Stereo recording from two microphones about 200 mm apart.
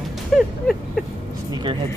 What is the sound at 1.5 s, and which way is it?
Vehicle, 20° right (ahead or behind).